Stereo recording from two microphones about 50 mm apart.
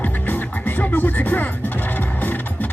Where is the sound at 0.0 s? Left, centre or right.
Left.